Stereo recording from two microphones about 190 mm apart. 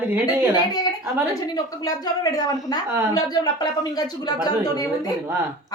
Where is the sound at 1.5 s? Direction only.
20° left (ahead or behind).